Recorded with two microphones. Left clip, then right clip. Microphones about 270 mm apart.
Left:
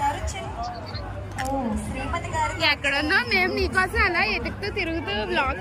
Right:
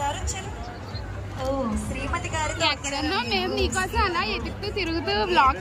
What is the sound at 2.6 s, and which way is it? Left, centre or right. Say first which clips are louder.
A woman's voice: left 4 dB; centre.